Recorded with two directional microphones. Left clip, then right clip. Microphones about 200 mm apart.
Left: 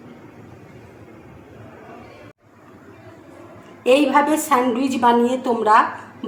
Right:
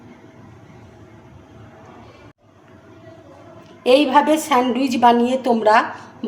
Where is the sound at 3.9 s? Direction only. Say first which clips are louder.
Right 2 dB; 35° right (ahead or behind).